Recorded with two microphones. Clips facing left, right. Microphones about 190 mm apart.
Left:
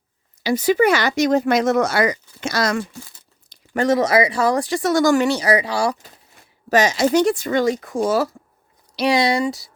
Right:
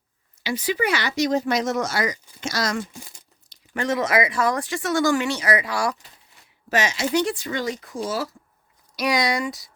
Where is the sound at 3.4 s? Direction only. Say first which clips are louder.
Left 7 dB; 40° left (ahead or behind).